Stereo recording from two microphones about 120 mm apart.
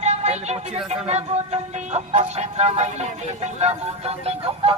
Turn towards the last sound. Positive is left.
turn(degrees=-60)  # may be behind; listen again after turning